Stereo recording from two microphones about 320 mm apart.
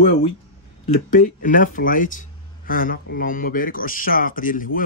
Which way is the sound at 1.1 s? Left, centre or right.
Left.